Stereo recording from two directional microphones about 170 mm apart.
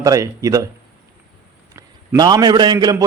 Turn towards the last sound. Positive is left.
turn(degrees=-25)  # may be behind; listen again after turning